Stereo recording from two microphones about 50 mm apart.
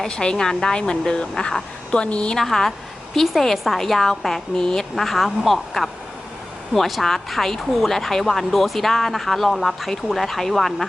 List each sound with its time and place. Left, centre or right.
0.2 s a woman's voice: centre
2.4 s speech: centre